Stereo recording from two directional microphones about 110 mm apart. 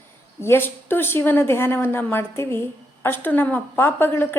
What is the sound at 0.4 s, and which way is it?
A woman's voice, 20° left (ahead or behind).